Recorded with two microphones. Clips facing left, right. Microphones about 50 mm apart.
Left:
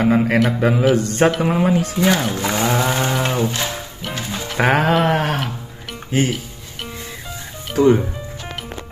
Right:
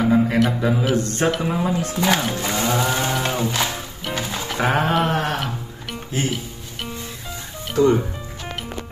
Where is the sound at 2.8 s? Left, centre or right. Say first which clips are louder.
Left 2 dB; left.